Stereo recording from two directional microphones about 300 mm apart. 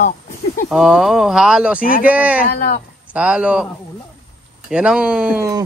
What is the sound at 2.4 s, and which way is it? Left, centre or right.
Speech, left.